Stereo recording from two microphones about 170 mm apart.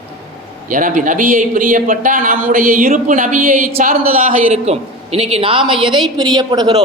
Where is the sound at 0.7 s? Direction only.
50° right (ahead or behind).